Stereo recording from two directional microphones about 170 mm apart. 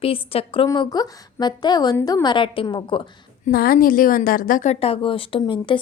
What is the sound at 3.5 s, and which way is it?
A woman's voice, 60° left (ahead or behind).